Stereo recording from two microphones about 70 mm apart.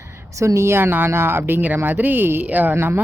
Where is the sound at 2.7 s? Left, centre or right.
Right.